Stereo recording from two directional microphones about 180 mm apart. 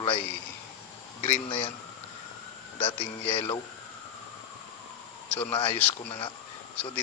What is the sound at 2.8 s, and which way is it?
Speech, 30° left (ahead or behind).